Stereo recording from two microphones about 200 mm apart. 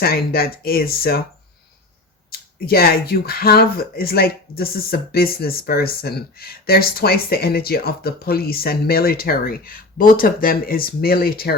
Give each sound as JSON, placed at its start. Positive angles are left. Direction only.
{"t": 0.0, "sound": "speech", "side_deg": 50}
{"t": 2.3, "sound": "speech", "side_deg": 50}